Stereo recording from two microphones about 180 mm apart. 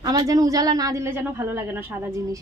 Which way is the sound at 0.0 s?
20° right (ahead or behind).